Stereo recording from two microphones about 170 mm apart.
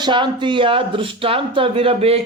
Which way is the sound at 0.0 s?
25° right (ahead or behind).